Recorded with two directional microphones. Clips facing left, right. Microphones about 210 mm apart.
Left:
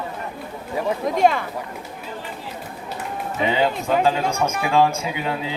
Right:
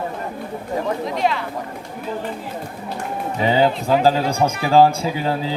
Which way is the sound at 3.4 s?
35° right (ahead or behind).